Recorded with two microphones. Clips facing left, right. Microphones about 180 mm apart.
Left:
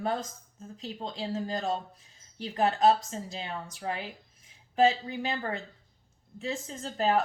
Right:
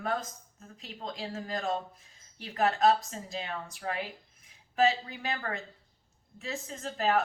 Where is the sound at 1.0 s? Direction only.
30° left (ahead or behind).